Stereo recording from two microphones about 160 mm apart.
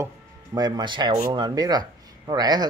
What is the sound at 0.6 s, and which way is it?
Speech, 25° right (ahead or behind).